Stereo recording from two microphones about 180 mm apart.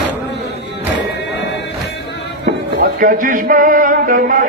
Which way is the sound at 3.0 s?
45° right (ahead or behind).